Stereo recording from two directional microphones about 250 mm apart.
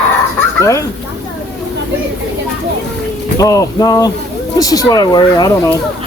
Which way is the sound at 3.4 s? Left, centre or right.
Centre.